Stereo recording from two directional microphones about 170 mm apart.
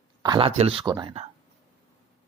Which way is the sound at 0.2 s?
25° right (ahead or behind).